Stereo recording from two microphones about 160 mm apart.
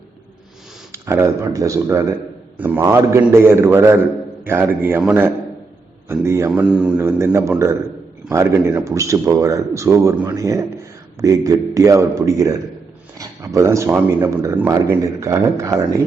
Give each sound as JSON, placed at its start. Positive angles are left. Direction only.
{"t": 0.9, "sound": "a man's voice", "side_deg": -15}
{"t": 6.5, "sound": "a man's voice", "side_deg": -5}
{"t": 8.3, "sound": "speech", "side_deg": -15}